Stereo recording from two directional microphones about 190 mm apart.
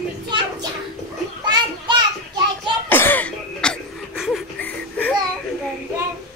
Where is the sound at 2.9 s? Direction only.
10° left (ahead or behind).